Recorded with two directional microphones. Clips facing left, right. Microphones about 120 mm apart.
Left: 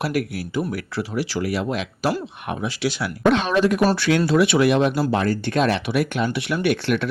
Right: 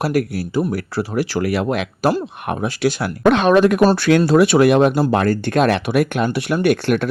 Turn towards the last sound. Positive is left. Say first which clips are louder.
# right 4 dB
turn(degrees=-45)  # may be behind; listen again after turning